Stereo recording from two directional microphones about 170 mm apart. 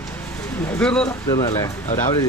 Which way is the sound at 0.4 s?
10° left (ahead or behind).